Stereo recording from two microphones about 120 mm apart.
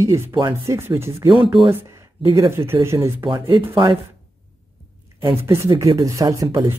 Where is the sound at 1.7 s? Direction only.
20° right (ahead or behind).